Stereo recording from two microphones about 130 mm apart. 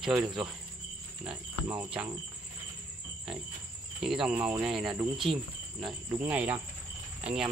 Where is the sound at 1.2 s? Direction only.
10° right (ahead or behind).